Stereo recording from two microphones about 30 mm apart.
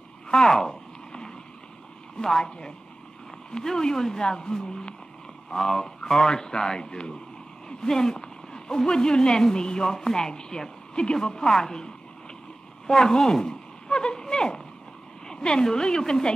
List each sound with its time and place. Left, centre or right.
0.3 s a sound: left
2.1 s a woman's voice: left
5.7 s speech: centre
6.1 s a woman's voice: left